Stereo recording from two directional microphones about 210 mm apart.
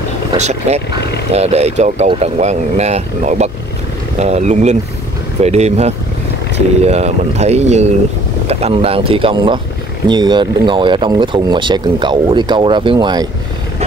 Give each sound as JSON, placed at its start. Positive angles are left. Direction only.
{"t": 0.4, "sound": "speech", "side_deg": -30}